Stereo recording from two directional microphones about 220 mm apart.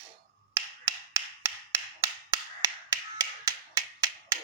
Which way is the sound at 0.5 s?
15° right (ahead or behind).